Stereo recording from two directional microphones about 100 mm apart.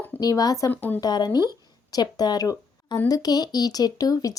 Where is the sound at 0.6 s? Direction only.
20° left (ahead or behind).